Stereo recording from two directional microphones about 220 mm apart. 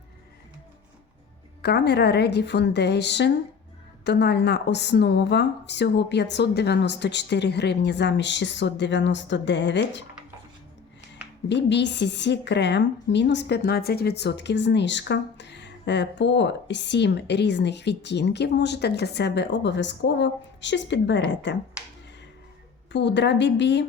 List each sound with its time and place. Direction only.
1.6 s a woman's voice: 50° left (ahead or behind)
11.4 s a woman's voice: 55° left (ahead or behind)
22.9 s a woman's voice: 50° left (ahead or behind)